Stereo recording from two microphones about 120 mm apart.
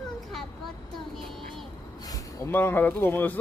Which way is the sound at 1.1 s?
Centre (ahead or behind).